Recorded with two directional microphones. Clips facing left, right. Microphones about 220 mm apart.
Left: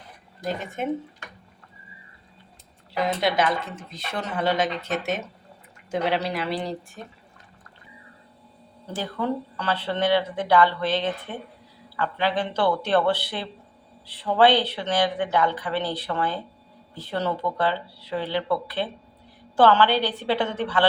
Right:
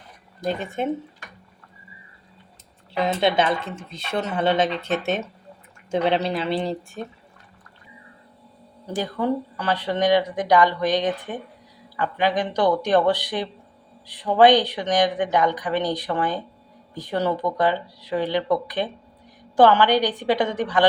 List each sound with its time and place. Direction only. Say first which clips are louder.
0.8 s speech: right 2 dB; 30° right (ahead or behind)
3.2 s speech: right 3 dB; 25° right (ahead or behind)
8.9 s speech: right 4 dB; 15° right (ahead or behind)